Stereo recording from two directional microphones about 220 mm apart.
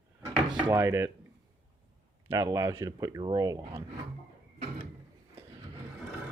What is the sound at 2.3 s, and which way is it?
Speech, 15° right (ahead or behind).